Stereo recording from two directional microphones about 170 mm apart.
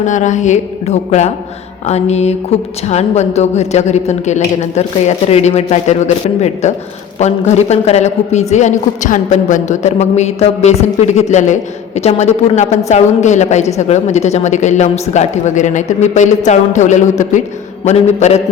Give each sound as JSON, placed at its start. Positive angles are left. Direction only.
{"t": 0.0, "sound": "a man's voice", "side_deg": 45}